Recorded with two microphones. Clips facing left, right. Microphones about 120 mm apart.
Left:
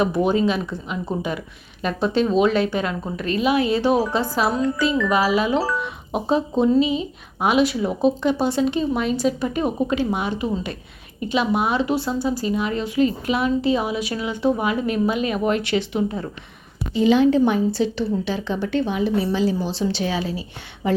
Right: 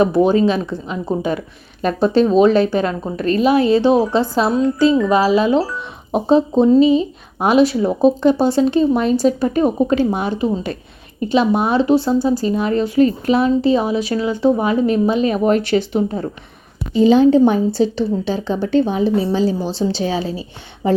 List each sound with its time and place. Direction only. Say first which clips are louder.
0.0 s speech: right 6 dB; 35° right (ahead or behind)